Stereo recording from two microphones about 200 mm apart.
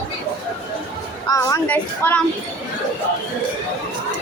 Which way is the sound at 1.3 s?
15° left (ahead or behind).